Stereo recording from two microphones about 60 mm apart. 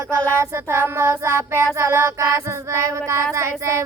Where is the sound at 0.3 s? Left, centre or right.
Right.